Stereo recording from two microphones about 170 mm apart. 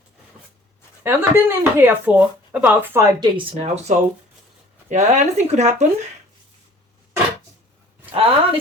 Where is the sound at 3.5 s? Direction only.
40° right (ahead or behind).